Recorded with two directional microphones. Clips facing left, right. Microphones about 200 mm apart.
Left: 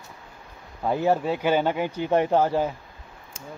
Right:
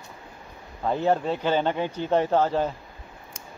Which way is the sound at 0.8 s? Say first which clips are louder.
Left 1 dB; 10° left (ahead or behind).